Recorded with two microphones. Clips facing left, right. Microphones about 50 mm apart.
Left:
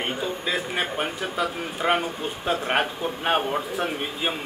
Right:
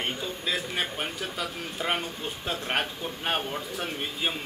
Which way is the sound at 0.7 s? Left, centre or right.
Centre.